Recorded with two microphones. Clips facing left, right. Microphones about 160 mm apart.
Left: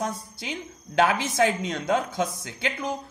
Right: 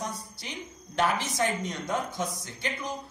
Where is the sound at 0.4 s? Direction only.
90° left.